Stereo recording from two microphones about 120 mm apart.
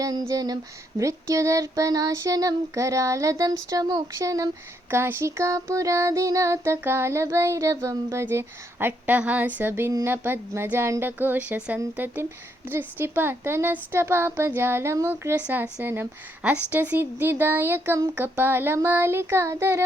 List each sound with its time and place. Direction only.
0.0 s child singing: 30° right (ahead or behind)
9.9 s speech: 20° right (ahead or behind)
18.1 s child singing: 15° right (ahead or behind)